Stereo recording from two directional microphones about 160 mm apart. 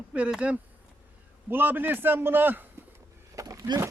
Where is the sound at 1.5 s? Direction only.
10° right (ahead or behind).